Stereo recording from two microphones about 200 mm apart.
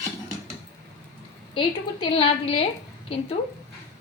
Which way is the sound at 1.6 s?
30° left (ahead or behind).